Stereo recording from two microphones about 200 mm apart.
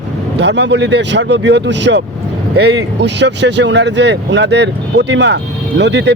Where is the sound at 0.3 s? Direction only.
60° right (ahead or behind).